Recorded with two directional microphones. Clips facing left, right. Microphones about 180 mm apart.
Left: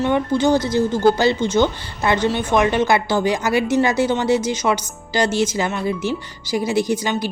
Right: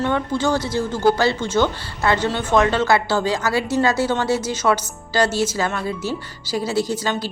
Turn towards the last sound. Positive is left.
turn(degrees=15)  # may be behind; listen again after turning